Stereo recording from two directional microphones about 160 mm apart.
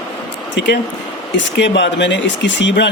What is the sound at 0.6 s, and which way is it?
Speech, 90° left.